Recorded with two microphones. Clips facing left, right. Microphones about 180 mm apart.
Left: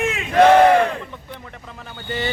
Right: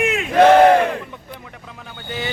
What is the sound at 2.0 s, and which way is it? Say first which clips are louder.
Speech: left 2 dB; centre (ahead or behind).